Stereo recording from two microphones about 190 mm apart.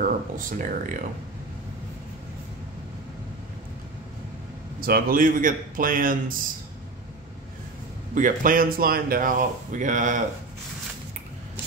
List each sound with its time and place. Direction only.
0.0 s a sound: 45° right (ahead or behind)
4.7 s speech: 50° right (ahead or behind)
8.1 s speech: 45° right (ahead or behind)